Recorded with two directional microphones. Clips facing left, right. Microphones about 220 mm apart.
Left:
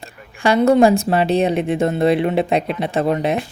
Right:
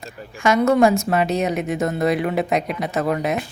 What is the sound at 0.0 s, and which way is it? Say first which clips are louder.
Speech: left 1 dB; 30° left (ahead or behind).